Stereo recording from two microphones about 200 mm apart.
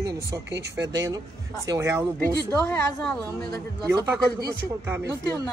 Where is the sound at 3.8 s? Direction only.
15° right (ahead or behind).